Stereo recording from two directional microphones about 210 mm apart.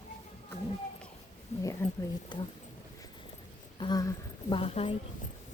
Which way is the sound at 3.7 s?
20° left (ahead or behind).